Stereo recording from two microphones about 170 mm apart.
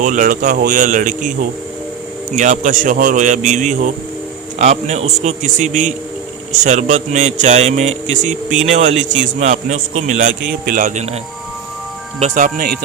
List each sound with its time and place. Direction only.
0.0 s a man's voice: 50° right (ahead or behind)
12.2 s a man's voice: 50° right (ahead or behind)